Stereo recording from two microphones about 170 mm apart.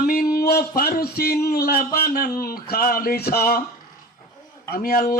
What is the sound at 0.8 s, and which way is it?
A man's voice, 60° left (ahead or behind).